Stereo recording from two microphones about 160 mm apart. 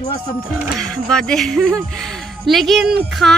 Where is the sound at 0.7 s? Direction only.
5° left (ahead or behind).